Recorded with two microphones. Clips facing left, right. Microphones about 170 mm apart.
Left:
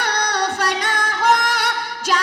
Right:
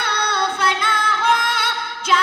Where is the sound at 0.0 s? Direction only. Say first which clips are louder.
Left 1 dB; 40° left (ahead or behind).